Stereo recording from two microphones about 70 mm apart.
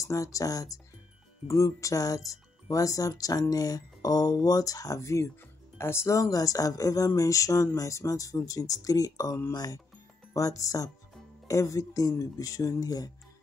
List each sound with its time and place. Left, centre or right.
0.0 s speech: left
6.1 s speech: left
9.5 s speech: left
10.3 s speech: left